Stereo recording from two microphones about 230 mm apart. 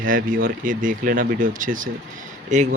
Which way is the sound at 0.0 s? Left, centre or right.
Right.